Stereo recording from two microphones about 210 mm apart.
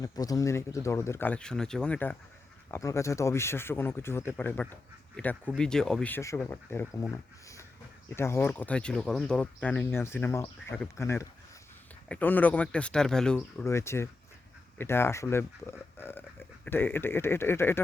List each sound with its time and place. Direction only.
0.0 s speech: 15° left (ahead or behind)